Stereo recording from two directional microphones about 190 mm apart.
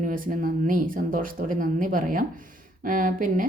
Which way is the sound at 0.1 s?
45° right (ahead or behind).